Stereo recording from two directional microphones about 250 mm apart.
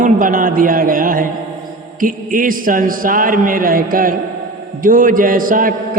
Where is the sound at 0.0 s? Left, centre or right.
Right.